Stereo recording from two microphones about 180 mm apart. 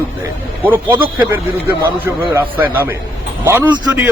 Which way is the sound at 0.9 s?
25° right (ahead or behind).